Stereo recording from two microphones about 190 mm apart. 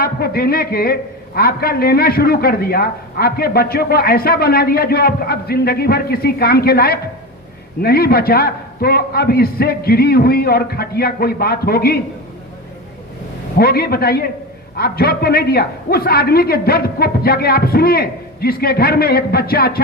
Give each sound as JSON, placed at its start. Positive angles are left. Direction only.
{"t": 0.0, "sound": "a sound", "side_deg": 55}
{"t": 1.4, "sound": "a man's voice", "side_deg": 55}
{"t": 13.6, "sound": "a man's voice", "side_deg": 55}